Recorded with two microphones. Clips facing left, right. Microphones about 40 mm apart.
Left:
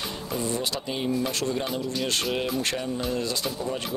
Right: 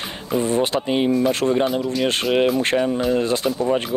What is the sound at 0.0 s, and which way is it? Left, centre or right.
Speech, right.